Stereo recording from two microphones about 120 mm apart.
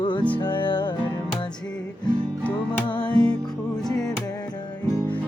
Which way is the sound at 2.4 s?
10° left (ahead or behind).